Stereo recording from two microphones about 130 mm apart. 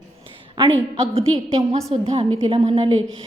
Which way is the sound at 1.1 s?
45° right (ahead or behind).